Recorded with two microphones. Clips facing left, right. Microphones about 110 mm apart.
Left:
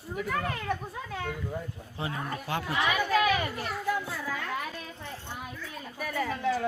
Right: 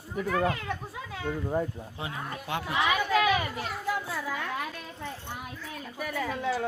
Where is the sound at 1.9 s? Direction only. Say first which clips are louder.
Left 7 dB; 15° right (ahead or behind).